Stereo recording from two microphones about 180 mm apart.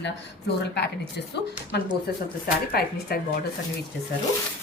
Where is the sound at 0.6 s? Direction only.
70° left (ahead or behind).